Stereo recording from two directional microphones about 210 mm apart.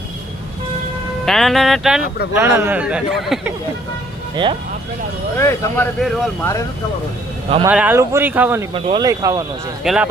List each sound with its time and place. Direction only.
1.2 s speech: centre (ahead or behind)
5.4 s speech: 10° left (ahead or behind)
6.0 s speech: centre (ahead or behind)
7.7 s speech: 5° right (ahead or behind)
8.7 s speech: 20° right (ahead or behind)
9.8 s speech: 5° right (ahead or behind)